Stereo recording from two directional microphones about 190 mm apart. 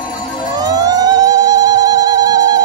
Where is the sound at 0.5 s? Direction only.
20° right (ahead or behind).